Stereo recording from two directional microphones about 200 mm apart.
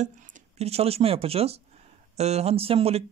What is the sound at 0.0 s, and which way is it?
Speech, 35° right (ahead or behind).